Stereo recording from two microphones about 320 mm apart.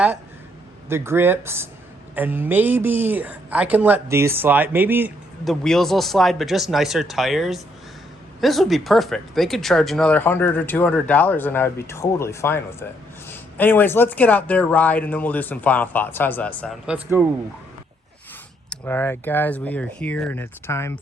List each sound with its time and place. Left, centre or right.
0.9 s speech: centre
18.7 s speech: centre